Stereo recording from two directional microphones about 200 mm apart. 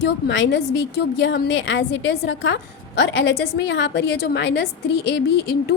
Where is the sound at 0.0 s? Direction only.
60° left (ahead or behind).